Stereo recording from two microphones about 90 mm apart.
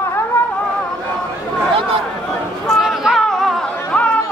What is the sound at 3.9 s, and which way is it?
Chatter, 15° left (ahead or behind).